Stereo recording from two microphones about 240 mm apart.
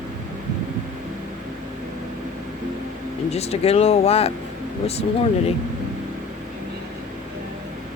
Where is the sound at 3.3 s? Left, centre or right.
Left.